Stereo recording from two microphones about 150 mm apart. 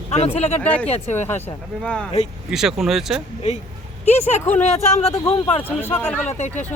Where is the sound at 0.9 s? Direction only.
50° left (ahead or behind).